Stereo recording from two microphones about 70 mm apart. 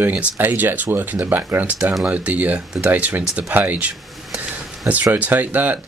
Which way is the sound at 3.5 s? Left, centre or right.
Right.